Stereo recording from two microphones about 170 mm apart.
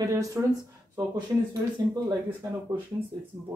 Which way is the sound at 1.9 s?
20° right (ahead or behind).